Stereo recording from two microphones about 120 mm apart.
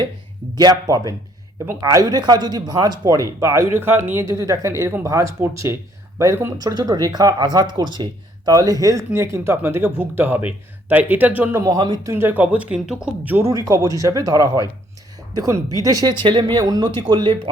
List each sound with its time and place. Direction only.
0.5 s speech: 35° right (ahead or behind); by 11.6 s 15° right (ahead or behind)
11.6 s speech: 35° right (ahead or behind)
12.1 s speech: 15° right (ahead or behind)
13.4 s speech: 25° right (ahead or behind)
16.2 s speech: 40° right (ahead or behind)